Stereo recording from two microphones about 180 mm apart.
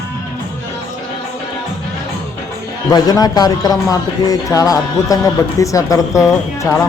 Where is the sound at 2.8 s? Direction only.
20° left (ahead or behind).